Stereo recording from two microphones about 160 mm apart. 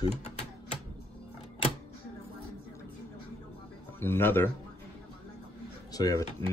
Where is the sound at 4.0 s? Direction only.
15° left (ahead or behind).